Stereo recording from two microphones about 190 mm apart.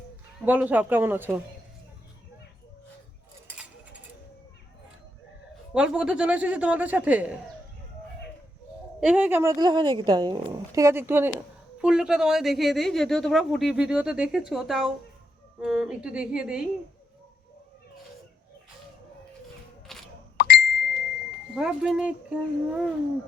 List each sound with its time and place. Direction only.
0.4 s speech: 10° right (ahead or behind)
5.7 s speech: 5° right (ahead or behind)
9.0 s a woman's voice: 5° right (ahead or behind)
19.9 s beep: centre (ahead or behind)
20.3 s plop: 55° left (ahead or behind)
21.5 s a woman's voice: 5° right (ahead or behind)